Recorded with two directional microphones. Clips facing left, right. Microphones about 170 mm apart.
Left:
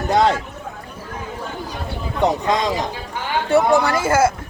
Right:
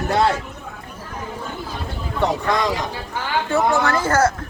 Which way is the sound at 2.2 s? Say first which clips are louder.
Left 2 dB; 20° left (ahead or behind).